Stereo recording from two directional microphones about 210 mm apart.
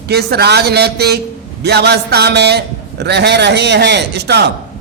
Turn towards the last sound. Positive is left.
turn(degrees=-50)  # may be behind; listen again after turning